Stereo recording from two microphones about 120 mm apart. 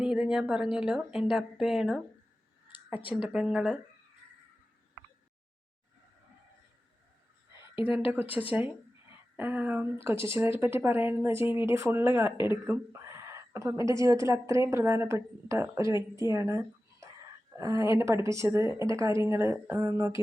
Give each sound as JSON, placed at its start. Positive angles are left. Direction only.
{"t": 0.0, "sound": "a woman's voice", "side_deg": -5}
{"t": 2.7, "sound": "a sound", "side_deg": 45}
{"t": 3.2, "sound": "a woman's voice", "side_deg": -10}
{"t": 7.9, "sound": "a woman's voice", "side_deg": -15}
{"t": 16.3, "sound": "a sound", "side_deg": -25}
{"t": 17.6, "sound": "a woman's voice", "side_deg": -30}